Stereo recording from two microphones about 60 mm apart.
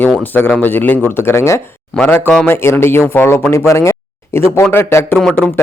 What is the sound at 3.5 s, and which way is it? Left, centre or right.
Speech, left.